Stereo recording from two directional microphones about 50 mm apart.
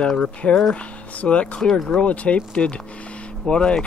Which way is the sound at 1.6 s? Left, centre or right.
Centre.